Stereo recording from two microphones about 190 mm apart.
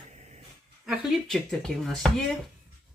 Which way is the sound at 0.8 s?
Centre (ahead or behind).